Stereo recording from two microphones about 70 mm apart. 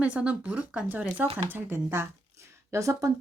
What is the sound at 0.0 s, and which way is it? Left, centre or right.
Speech, centre.